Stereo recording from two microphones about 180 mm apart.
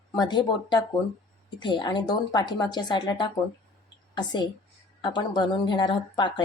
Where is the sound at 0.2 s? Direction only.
25° left (ahead or behind).